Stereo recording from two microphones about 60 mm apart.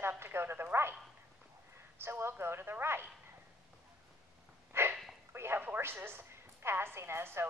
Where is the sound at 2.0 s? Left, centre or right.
Right.